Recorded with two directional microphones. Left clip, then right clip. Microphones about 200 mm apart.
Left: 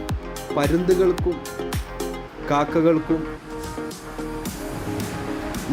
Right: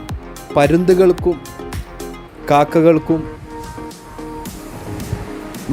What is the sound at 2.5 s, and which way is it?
Speech, 40° right (ahead or behind).